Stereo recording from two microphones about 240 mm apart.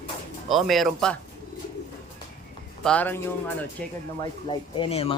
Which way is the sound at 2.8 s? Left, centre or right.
Centre.